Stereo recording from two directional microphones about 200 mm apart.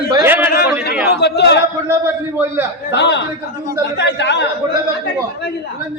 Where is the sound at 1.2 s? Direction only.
60° left (ahead or behind).